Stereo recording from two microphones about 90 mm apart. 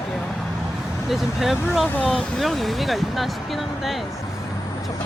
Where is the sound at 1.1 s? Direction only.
5° right (ahead or behind).